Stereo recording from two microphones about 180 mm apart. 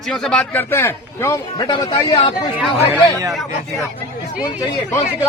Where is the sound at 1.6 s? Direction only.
25° left (ahead or behind).